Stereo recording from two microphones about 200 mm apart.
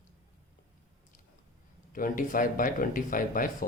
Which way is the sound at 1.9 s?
45° left (ahead or behind).